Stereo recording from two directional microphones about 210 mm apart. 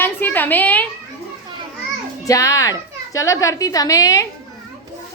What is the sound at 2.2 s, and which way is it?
A woman's voice, 15° left (ahead or behind).